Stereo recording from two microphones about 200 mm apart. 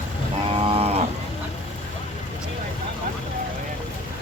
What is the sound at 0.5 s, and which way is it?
Livestock, 30° right (ahead or behind).